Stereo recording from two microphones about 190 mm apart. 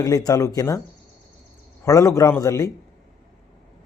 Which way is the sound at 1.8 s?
15° left (ahead or behind).